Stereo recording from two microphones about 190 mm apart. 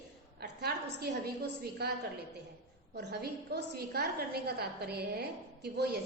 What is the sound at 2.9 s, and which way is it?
A woman's voice, 60° right (ahead or behind).